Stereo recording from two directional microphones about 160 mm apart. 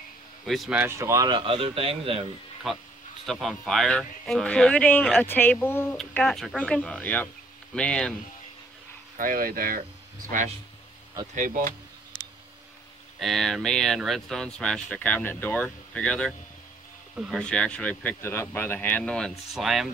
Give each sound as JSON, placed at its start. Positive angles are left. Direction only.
{"t": 0.5, "sound": "speech", "side_deg": 0}
{"t": 0.7, "sound": "speech", "side_deg": -15}
{"t": 2.6, "sound": "a man's voice", "side_deg": 0}
{"t": 9.1, "sound": "speech", "side_deg": -60}
{"t": 13.2, "sound": "a man's voice", "side_deg": 0}